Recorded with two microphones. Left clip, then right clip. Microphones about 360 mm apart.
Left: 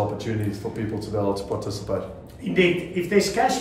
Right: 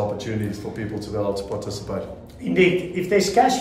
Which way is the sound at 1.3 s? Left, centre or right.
Centre.